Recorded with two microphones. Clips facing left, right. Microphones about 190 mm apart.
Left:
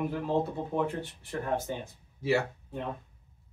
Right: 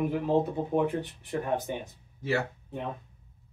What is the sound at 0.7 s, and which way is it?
Speech, 20° right (ahead or behind).